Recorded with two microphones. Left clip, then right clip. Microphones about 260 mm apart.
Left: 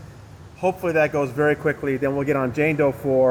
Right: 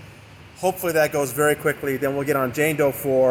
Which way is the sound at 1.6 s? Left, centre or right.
Right.